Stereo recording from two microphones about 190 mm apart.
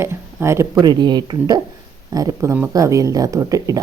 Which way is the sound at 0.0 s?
15° right (ahead or behind).